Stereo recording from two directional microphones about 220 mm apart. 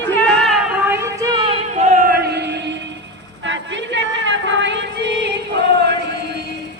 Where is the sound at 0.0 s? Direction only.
10° left (ahead or behind); by 5.3 s 55° right (ahead or behind).